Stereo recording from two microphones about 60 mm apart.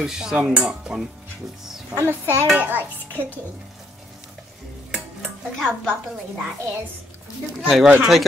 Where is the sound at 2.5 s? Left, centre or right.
Right.